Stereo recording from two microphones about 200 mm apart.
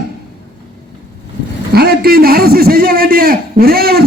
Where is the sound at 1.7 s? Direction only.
50° right (ahead or behind).